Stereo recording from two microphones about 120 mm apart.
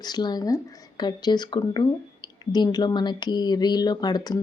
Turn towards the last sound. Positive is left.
turn(degrees=35)  # may be behind; listen again after turning